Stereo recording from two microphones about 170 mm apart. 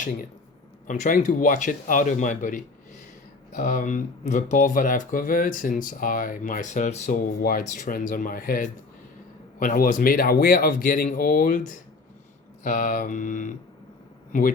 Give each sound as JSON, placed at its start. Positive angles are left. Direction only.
{"t": 0.9, "sound": "speech", "side_deg": 50}